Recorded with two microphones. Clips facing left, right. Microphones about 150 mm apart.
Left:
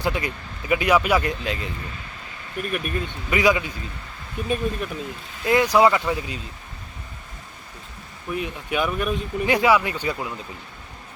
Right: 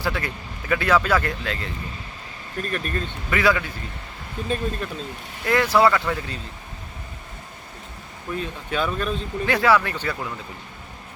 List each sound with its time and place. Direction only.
0.0 s speech: 20° left (ahead or behind)
8.4 s speech: 15° left (ahead or behind)